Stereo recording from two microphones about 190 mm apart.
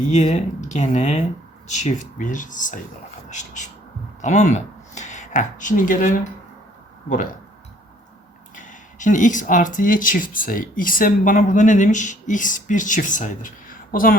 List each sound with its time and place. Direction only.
0.1 s speech: 35° left (ahead or behind)
8.5 s speech: 40° left (ahead or behind)